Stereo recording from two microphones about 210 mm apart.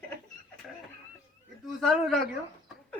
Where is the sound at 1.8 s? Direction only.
Centre (ahead or behind).